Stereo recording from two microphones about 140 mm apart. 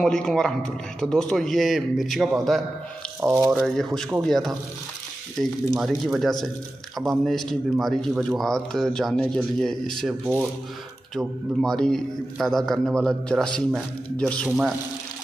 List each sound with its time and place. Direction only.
0.0 s a man's voice: 5° left (ahead or behind)
3.3 s speech: 20° right (ahead or behind)
3.5 s a man's voice: 5° left (ahead or behind)
11.6 s a man's voice: 5° left (ahead or behind)